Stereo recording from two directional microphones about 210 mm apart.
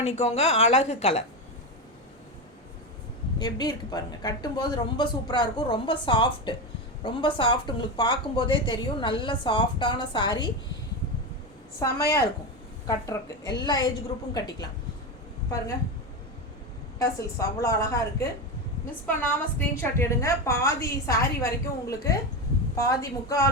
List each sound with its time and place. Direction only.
0.0 s a woman's voice: 30° left (ahead or behind)
3.3 s a woman's voice: 20° left (ahead or behind)
11.8 s a woman's voice: 15° left (ahead or behind)
17.0 s a woman's voice: 15° left (ahead or behind)